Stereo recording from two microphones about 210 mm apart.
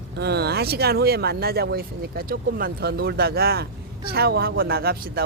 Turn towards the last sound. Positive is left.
turn(degrees=-45)  # may be behind; listen again after turning